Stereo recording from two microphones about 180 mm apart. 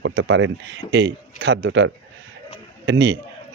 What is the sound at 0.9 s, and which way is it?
A man's voice, 65° right (ahead or behind).